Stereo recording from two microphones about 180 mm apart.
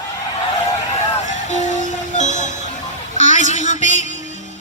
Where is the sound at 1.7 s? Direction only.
40° right (ahead or behind).